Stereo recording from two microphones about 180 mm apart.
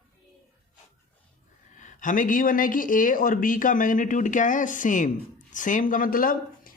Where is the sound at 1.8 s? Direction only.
45° left (ahead or behind).